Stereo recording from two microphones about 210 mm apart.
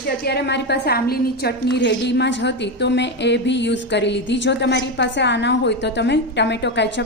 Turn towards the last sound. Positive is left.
turn(degrees=55)  # may be behind; listen again after turning